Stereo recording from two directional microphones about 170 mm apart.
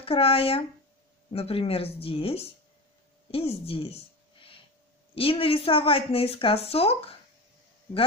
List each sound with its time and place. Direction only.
0.0 s a woman's voice: 35° left (ahead or behind)
3.3 s a sound: 35° left (ahead or behind)
5.1 s a woman's voice: 35° left (ahead or behind)